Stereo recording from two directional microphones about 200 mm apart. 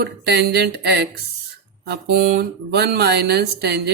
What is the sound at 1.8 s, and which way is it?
Speech, 50° right (ahead or behind).